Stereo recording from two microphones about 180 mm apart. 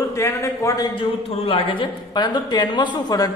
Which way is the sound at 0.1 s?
15° left (ahead or behind).